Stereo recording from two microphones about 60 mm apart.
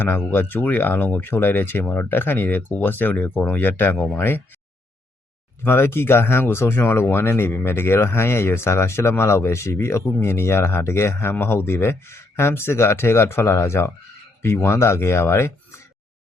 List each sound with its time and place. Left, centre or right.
0.0 s speech: left
5.6 s speech: left